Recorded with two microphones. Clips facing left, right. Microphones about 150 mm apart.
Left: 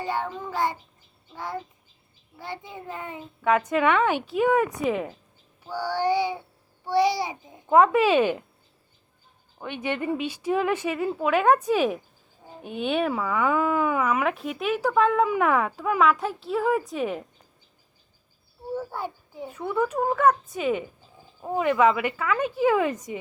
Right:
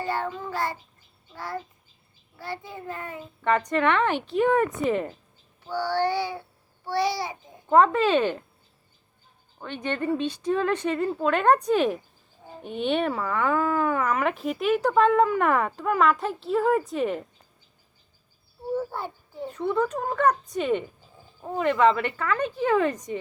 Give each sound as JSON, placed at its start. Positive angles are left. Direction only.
{"t": 0.0, "sound": "a child's voice", "side_deg": 15}
{"t": 3.4, "sound": "speech", "side_deg": 5}
{"t": 9.6, "sound": "speech", "side_deg": 10}
{"t": 18.9, "sound": "speech", "side_deg": 10}